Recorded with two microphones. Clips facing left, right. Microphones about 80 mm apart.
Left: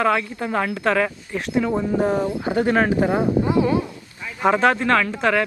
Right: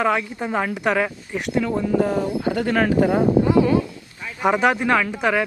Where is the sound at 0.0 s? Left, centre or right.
Centre.